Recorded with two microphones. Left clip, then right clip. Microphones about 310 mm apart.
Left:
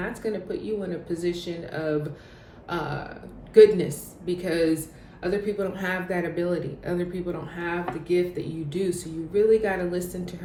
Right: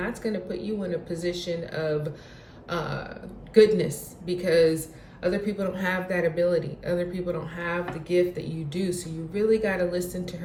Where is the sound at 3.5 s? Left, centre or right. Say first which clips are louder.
Left 3 dB; centre.